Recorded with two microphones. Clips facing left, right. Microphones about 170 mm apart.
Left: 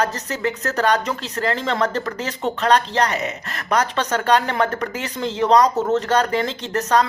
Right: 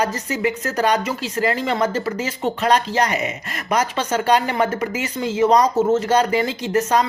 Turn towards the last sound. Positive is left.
turn(degrees=-10)  # may be behind; listen again after turning